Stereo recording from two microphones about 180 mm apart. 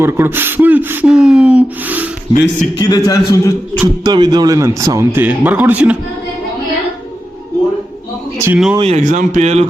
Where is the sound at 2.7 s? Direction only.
20° left (ahead or behind).